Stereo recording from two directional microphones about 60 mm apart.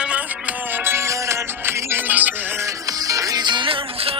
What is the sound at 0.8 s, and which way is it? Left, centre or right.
Music, right.